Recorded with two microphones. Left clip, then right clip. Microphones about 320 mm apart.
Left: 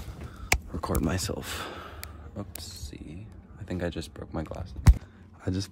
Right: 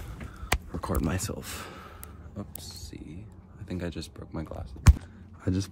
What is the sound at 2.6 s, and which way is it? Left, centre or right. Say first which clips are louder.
Speech: left 1 dB; centre.